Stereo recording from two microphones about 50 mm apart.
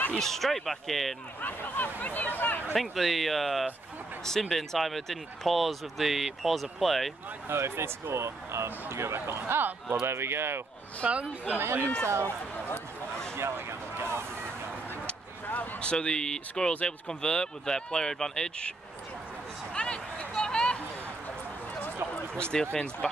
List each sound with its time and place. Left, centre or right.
0.2 s speech: centre
1.4 s speech: left
2.7 s speech: centre
7.4 s speech: right
8.9 s speech: right
11.1 s speech: right
11.6 s speech: right
13.4 s a sound: right
15.4 s a sound: left
15.8 s speech: centre
19.7 s a sound: centre
22.3 s speech: centre
22.7 s speech: left